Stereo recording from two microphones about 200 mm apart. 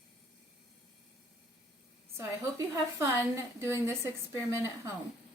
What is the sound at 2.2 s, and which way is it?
A woman's voice, 15° right (ahead or behind).